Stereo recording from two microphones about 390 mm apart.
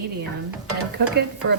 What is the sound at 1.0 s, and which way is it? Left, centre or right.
Speech, right.